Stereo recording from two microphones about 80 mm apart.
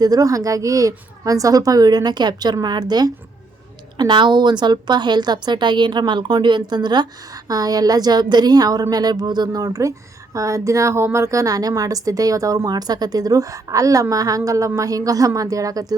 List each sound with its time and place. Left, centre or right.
0.0 s a woman's voice: right
3.9 s a woman's voice: right